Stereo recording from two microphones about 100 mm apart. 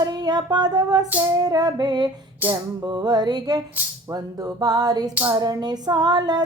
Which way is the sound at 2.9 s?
45° right (ahead or behind).